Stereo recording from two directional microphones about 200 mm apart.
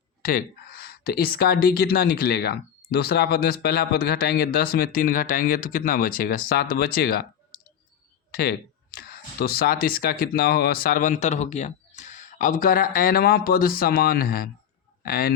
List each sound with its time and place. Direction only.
0.2 s speech: 45° left (ahead or behind)
8.4 s speech: 50° left (ahead or behind)